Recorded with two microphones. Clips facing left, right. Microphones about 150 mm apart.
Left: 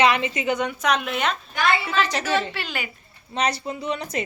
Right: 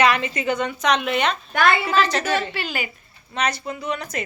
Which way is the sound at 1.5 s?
55° right (ahead or behind).